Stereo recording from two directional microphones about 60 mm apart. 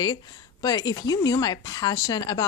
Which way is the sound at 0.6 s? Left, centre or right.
Left.